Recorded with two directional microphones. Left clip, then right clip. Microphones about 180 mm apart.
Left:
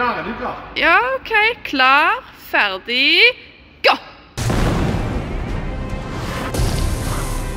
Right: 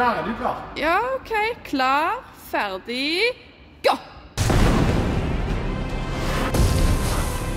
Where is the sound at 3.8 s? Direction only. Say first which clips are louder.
Left 5 dB; 5° right (ahead or behind).